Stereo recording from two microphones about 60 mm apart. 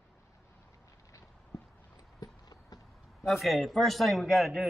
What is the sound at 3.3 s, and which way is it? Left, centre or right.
A man's voice, centre.